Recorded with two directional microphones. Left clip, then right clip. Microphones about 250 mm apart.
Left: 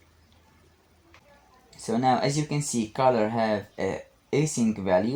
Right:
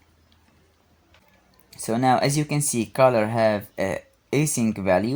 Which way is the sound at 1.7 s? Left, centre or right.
Right.